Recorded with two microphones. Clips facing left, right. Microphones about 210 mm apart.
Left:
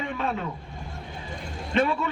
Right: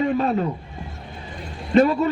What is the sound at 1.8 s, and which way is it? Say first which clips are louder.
Speech: right 8 dB; 40° right (ahead or behind).